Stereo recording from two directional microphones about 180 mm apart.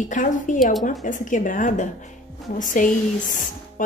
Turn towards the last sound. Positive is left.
turn(degrees=45)  # may be behind; listen again after turning